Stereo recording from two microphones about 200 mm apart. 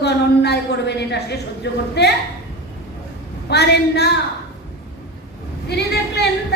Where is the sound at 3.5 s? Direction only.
55° left (ahead or behind).